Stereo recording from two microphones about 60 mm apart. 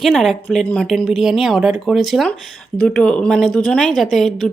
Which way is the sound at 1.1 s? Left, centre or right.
Centre.